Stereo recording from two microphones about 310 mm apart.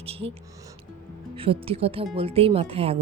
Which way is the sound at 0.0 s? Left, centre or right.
Centre.